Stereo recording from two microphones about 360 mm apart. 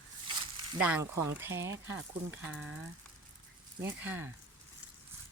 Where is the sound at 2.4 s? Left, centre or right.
Centre.